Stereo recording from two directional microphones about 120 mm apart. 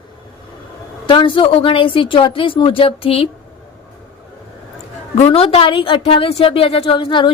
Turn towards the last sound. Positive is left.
turn(degrees=45)  # may be behind; listen again after turning